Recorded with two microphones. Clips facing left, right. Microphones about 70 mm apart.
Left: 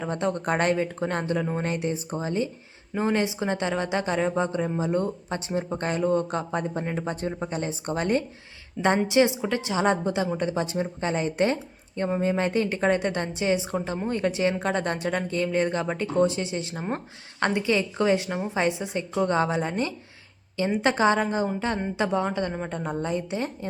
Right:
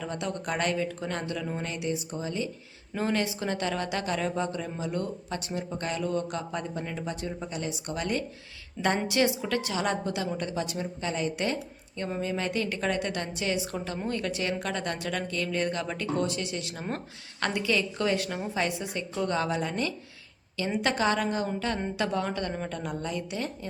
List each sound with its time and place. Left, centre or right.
0.0 s speech: left
2.9 s speech: left
9.0 s speech: left